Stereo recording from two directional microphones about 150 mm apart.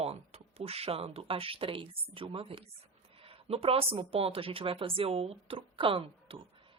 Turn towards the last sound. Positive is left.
turn(degrees=-35)  # may be behind; listen again after turning